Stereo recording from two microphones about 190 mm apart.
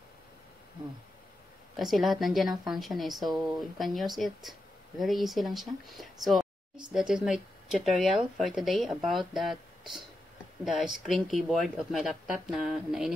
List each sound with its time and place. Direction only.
1.8 s speech: centre (ahead or behind)